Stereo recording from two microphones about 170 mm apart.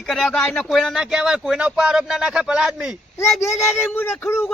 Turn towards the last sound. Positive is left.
turn(degrees=15)  # may be behind; listen again after turning